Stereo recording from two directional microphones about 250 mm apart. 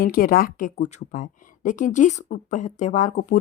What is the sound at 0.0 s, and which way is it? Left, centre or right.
Speech, left.